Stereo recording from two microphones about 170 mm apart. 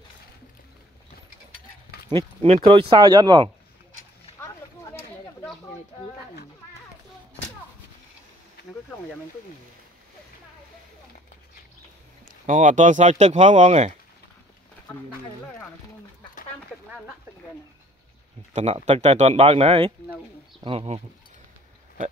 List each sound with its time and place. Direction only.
2.4 s speech: 35° right (ahead or behind)
12.4 s speech: 45° right (ahead or behind)
18.5 s speech: 40° right (ahead or behind)